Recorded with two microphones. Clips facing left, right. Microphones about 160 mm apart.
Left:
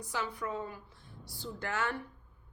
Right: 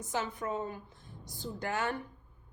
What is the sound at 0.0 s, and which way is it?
A woman's voice, 20° right (ahead or behind).